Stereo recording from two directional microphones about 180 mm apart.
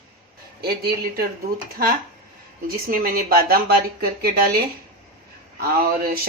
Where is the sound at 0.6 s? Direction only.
60° right (ahead or behind).